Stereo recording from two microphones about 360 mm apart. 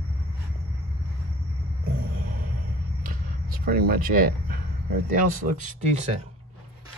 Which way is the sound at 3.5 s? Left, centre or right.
Right.